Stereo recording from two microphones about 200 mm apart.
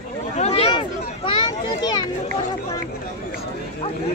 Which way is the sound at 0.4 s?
30° left (ahead or behind).